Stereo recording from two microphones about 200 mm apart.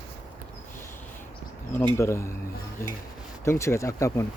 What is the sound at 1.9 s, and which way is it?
Speech, 15° left (ahead or behind).